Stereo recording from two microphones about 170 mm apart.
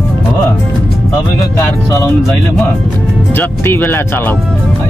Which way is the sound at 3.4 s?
10° left (ahead or behind).